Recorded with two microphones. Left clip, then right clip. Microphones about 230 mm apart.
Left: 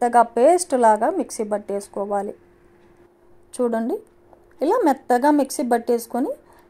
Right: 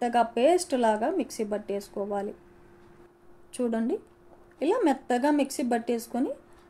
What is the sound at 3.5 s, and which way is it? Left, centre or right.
Speech, left.